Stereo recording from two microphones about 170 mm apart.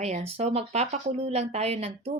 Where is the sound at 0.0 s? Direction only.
40° right (ahead or behind).